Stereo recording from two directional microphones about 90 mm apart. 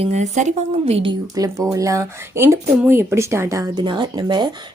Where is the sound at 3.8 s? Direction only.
55° right (ahead or behind).